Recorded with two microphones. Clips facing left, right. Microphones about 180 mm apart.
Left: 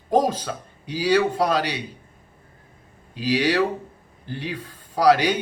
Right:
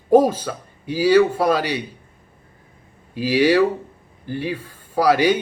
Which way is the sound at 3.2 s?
5° right (ahead or behind).